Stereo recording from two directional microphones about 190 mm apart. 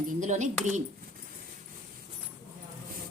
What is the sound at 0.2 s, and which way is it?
Speech, 40° right (ahead or behind).